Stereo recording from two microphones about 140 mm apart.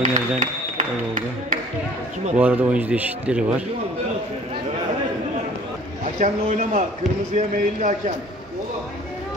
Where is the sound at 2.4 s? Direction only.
10° right (ahead or behind).